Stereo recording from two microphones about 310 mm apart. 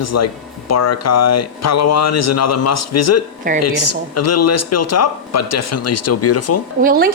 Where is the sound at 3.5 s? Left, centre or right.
Right.